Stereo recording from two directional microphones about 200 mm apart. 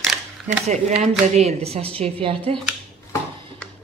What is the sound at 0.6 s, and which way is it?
Speech, 35° right (ahead or behind).